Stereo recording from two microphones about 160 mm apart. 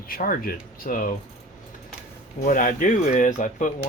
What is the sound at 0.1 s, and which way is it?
Speech, 65° left (ahead or behind).